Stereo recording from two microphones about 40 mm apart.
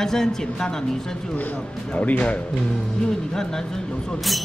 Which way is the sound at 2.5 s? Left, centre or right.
Centre.